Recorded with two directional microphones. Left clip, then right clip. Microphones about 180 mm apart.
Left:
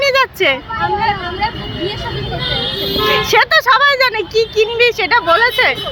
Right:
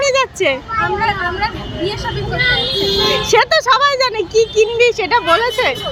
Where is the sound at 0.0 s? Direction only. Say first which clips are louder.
Left 2 dB; 5° right (ahead or behind).